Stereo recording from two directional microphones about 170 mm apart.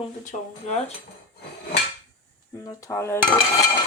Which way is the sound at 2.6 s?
20° left (ahead or behind).